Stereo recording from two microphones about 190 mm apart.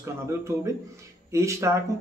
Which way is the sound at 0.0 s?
15° right (ahead or behind).